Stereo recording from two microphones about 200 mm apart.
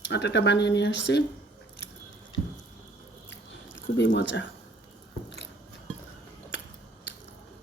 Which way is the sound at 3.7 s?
60° left (ahead or behind).